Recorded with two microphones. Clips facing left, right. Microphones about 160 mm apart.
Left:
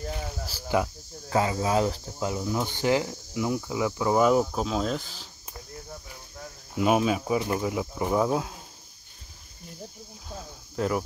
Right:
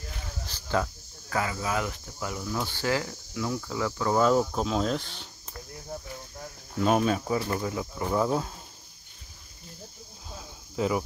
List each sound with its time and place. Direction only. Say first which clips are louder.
0.5 s cricket: left 2 dB; 10° left (ahead or behind)
1.3 s speech: left 5 dB; 25° left (ahead or behind); by 5.3 s centre (ahead or behind)
6.7 s speech: left 1 dB; 10° left (ahead or behind)